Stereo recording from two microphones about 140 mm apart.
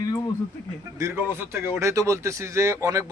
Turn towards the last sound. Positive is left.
turn(degrees=-25)  # may be behind; listen again after turning